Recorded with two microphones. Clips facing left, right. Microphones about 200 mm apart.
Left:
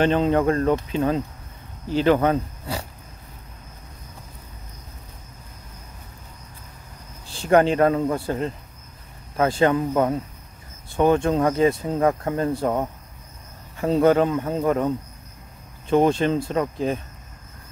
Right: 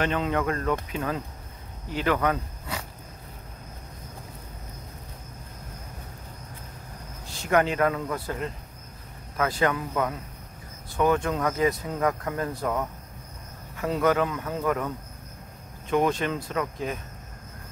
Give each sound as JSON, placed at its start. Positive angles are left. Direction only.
{"t": 0.0, "sound": "speech", "side_deg": 30}
{"t": 7.2, "sound": "speech", "side_deg": 30}
{"t": 15.9, "sound": "speech", "side_deg": 30}